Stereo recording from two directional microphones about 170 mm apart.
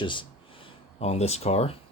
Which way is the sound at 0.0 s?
30° left (ahead or behind).